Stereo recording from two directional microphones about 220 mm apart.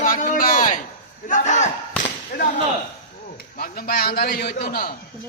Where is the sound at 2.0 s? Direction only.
40° left (ahead or behind).